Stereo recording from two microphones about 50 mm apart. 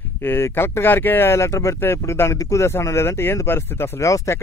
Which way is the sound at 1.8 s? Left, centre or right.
Left.